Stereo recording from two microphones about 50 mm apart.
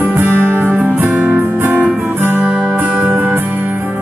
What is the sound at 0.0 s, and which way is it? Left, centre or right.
Music, right.